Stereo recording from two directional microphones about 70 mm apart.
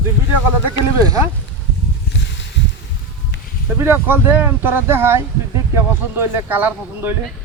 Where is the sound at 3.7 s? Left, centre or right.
Right.